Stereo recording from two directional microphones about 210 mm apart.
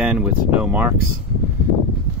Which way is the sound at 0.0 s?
5° right (ahead or behind).